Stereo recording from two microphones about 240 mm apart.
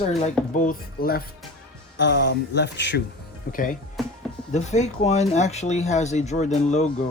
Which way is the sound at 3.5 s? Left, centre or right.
Left.